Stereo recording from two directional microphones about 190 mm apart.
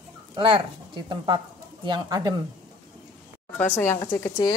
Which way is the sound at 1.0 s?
25° right (ahead or behind).